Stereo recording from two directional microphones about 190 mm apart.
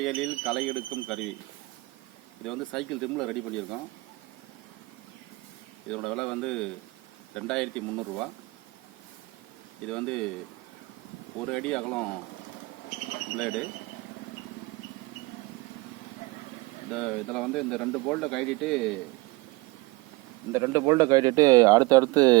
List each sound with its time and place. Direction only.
0.0 s speech: centre (ahead or behind)
2.4 s speech: centre (ahead or behind)
5.9 s speech: 5° left (ahead or behind)
9.8 s speech: 5° left (ahead or behind)
11.3 s speech: 5° left (ahead or behind)
16.9 s speech: 5° left (ahead or behind)
20.5 s speech: 15° right (ahead or behind)